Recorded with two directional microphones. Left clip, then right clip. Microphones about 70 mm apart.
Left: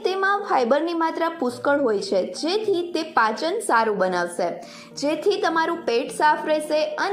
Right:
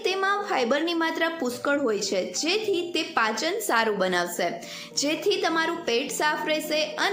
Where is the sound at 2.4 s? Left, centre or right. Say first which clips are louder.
Left 3 dB; right.